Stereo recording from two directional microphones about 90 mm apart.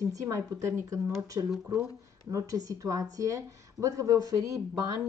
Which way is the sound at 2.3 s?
40° right (ahead or behind).